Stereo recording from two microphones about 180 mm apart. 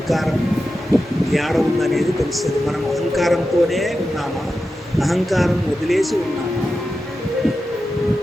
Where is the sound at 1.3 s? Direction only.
Centre (ahead or behind).